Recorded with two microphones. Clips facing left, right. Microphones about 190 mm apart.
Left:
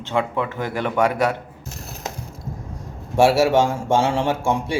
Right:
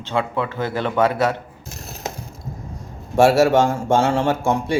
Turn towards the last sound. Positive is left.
turn(degrees=10)  # may be behind; listen again after turning